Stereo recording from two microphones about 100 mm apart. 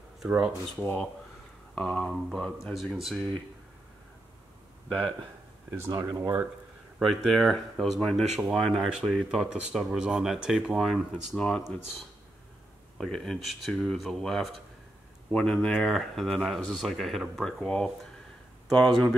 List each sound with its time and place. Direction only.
0.2 s speech: 5° right (ahead or behind)
0.7 s speech: 15° left (ahead or behind)
5.9 s speech: 35° right (ahead or behind)
7.0 s speech: centre (ahead or behind)
12.9 s speech: 5° left (ahead or behind)